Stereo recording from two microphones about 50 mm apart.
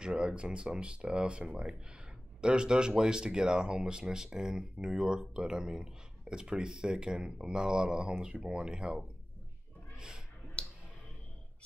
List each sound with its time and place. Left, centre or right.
0.0 s speech: centre
9.9 s a sound: centre
10.6 s clicking: left